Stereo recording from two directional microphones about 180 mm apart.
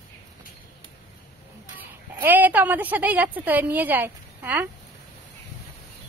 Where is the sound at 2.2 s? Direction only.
10° right (ahead or behind).